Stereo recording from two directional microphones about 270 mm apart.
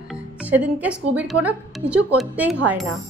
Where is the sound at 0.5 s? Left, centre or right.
Centre.